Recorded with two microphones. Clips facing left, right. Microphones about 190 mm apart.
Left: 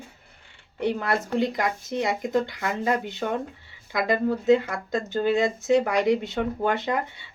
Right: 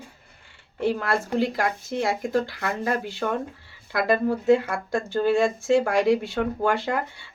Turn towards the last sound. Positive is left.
turn(degrees=20)  # may be behind; listen again after turning